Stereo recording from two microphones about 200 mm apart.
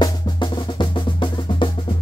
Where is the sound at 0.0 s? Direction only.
25° left (ahead or behind).